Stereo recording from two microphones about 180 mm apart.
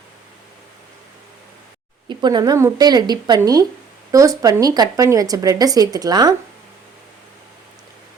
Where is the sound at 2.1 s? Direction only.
25° right (ahead or behind).